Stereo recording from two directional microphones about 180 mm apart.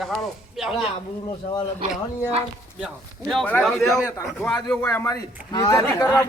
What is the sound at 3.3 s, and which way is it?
A man's voice, 5° left (ahead or behind).